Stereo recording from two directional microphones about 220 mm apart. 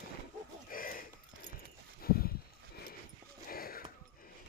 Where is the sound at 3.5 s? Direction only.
40° left (ahead or behind).